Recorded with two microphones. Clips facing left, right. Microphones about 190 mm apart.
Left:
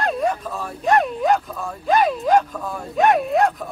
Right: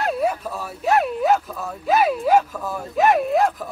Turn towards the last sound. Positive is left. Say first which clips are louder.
# even
turn(degrees=0)  # may be behind; listen again after turning